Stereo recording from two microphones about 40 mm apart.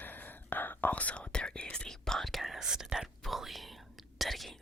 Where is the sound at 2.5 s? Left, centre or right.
Centre.